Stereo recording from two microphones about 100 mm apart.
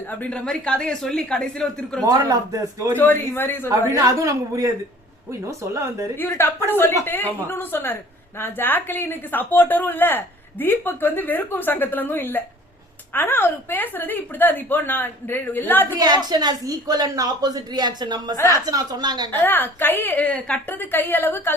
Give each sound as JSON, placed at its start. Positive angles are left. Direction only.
{"t": 0.1, "sound": "speech", "side_deg": 15}
{"t": 2.0, "sound": "a woman's voice", "side_deg": -40}
{"t": 3.0, "sound": "a woman's voice", "side_deg": 20}
{"t": 3.7, "sound": "a woman's voice", "side_deg": -35}
{"t": 6.1, "sound": "a woman's voice", "side_deg": 20}
{"t": 16.0, "sound": "a woman's voice", "side_deg": -40}
{"t": 19.3, "sound": "a woman's voice", "side_deg": 20}